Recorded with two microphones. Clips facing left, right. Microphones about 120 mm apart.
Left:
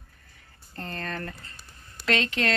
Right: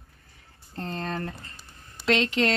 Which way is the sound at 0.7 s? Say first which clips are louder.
Right 3 dB; 30° right (ahead or behind).